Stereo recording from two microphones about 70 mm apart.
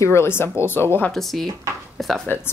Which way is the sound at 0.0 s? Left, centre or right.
Left.